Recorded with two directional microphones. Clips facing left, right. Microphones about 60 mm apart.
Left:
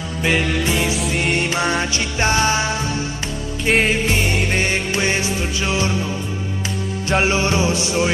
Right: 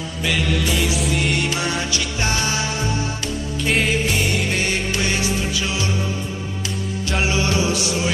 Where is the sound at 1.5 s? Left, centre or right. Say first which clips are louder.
Left 3 dB; left.